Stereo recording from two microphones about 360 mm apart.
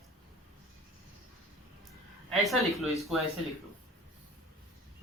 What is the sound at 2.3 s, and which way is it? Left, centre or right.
Speech, centre.